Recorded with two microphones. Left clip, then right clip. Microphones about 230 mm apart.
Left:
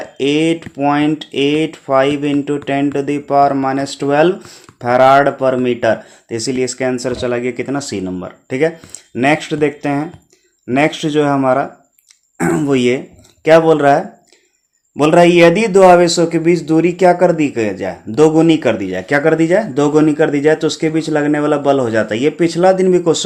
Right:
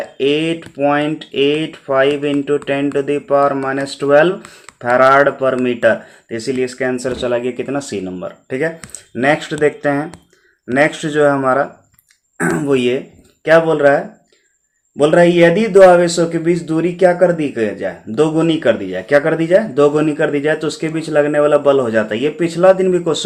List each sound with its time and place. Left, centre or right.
0.2 s speech: left